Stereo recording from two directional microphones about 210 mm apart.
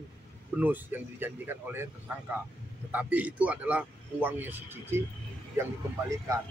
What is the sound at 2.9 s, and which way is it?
A man's voice, 5° right (ahead or behind).